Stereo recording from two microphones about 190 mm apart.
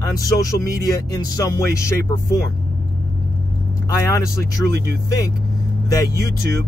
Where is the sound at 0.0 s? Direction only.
15° left (ahead or behind).